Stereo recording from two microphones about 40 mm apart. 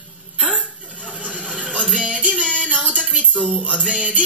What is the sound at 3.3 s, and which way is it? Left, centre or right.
Music, left.